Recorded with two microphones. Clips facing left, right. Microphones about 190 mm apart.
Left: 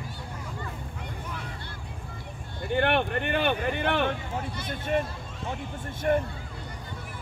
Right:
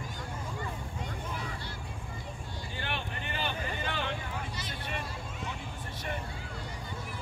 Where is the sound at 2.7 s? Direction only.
65° left (ahead or behind).